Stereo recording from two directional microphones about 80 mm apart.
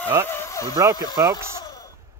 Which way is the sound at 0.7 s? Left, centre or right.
Right.